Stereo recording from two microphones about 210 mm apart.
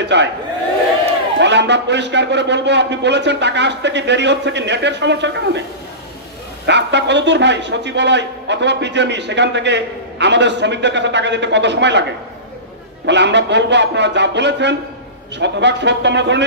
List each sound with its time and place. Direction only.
0.0 s a man's voice: 55° right (ahead or behind)
1.4 s a man's voice: 55° right (ahead or behind)
6.6 s a man's voice: 55° right (ahead or behind)